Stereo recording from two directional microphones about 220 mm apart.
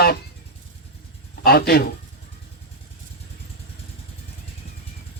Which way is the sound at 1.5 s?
45° left (ahead or behind).